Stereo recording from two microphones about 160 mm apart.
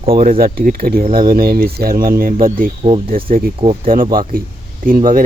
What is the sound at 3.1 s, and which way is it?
Speech, 65° right (ahead or behind).